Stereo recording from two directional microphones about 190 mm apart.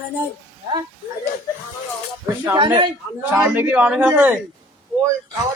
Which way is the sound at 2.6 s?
25° right (ahead or behind).